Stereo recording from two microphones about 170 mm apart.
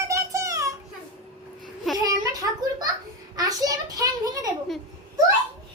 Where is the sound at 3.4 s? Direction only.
20° right (ahead or behind).